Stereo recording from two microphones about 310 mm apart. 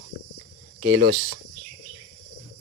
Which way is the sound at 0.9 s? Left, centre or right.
Right.